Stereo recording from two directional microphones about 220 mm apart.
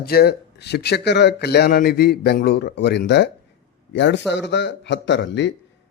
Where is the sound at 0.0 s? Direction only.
45° left (ahead or behind).